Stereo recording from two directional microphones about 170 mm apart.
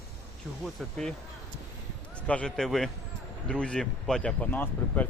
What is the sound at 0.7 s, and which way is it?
Speech, 5° left (ahead or behind).